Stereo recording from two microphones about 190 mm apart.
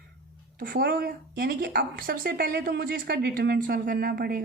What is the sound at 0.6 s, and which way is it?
A woman's voice, 50° right (ahead or behind).